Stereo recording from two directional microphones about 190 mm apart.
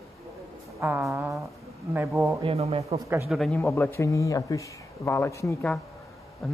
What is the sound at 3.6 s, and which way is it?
Speech, 10° left (ahead or behind).